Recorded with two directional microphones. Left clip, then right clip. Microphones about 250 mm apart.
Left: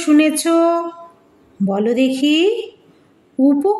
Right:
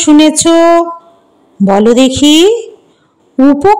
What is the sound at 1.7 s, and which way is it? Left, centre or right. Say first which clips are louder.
Speech: right 11 dB; right.